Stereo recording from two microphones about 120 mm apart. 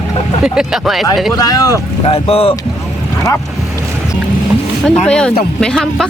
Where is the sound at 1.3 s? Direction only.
30° left (ahead or behind).